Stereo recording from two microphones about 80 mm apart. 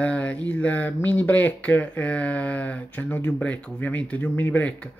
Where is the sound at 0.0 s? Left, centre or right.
Centre.